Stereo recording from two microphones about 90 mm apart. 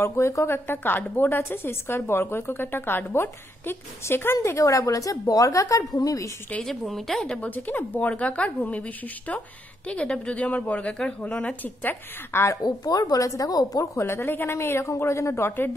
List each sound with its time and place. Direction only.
0.0 s a woman's voice: 30° left (ahead or behind)
6.6 s a woman's voice: 5° left (ahead or behind)
7.3 s a woman's voice: 20° left (ahead or behind)
11.6 s a woman's voice: 20° left (ahead or behind)
12.6 s a woman's voice: 50° left (ahead or behind); by 15.7 s 25° left (ahead or behind)